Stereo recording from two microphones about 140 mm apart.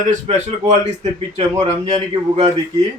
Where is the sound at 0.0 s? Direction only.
65° right (ahead or behind).